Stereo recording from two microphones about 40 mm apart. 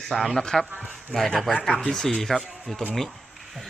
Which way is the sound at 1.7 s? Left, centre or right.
Centre.